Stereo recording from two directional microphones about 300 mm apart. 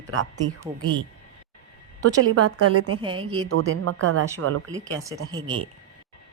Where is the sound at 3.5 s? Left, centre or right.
Right.